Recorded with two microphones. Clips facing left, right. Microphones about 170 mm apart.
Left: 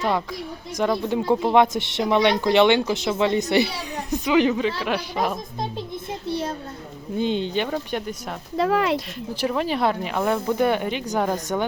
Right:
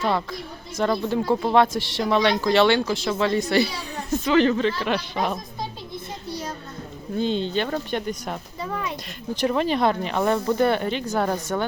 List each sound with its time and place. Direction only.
0.8 s speech: 15° left (ahead or behind)
6.2 s a sound: 25° left (ahead or behind)
7.2 s speech: 15° left (ahead or behind)
8.5 s speech: 80° left
9.3 s speech: 5° left (ahead or behind)